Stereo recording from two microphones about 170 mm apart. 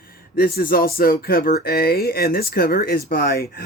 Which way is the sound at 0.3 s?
60° left (ahead or behind).